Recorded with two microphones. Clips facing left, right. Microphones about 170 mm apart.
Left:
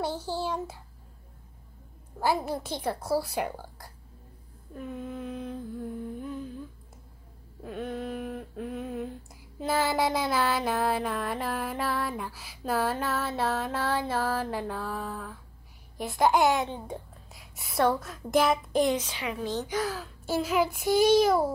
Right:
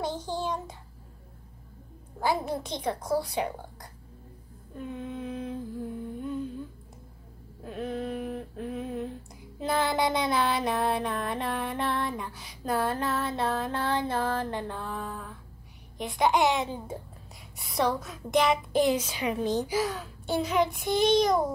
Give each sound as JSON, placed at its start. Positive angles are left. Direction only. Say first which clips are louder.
{"t": 0.0, "sound": "child singing", "louder": "even", "side_deg": 10}
{"t": 2.1, "sound": "child singing", "louder": "even", "side_deg": 5}
{"t": 4.7, "sound": "humming", "louder": "even", "side_deg": 0}
{"t": 7.6, "sound": "a sound", "louder": "right 1 dB", "side_deg": 0}
{"t": 9.6, "sound": "child singing", "louder": "even", "side_deg": 5}
{"t": 16.8, "sound": "a woman's voice", "louder": "even", "side_deg": 0}
{"t": 19.8, "sound": "child singing", "louder": "right 1 dB", "side_deg": 0}